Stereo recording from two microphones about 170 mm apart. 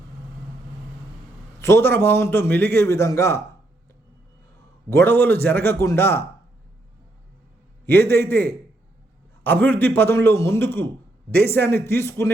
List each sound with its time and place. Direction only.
1.5 s a man's voice: 15° left (ahead or behind)
4.9 s a man's voice: 15° left (ahead or behind)
7.9 s a man's voice: 15° left (ahead or behind)